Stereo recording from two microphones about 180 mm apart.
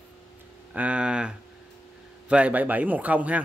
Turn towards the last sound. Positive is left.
turn(degrees=-10)  # may be behind; listen again after turning